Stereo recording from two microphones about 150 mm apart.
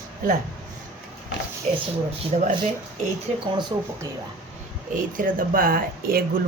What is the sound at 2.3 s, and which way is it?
Speech, 50° right (ahead or behind).